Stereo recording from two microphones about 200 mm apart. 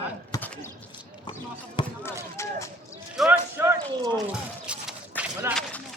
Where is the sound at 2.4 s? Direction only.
15° left (ahead or behind).